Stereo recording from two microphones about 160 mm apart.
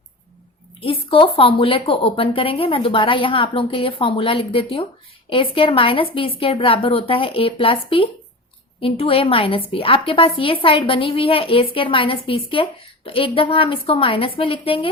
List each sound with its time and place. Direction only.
0.8 s a woman's voice: 35° left (ahead or behind)